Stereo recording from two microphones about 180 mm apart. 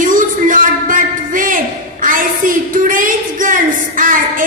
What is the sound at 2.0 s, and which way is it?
A woman's voice, 50° right (ahead or behind).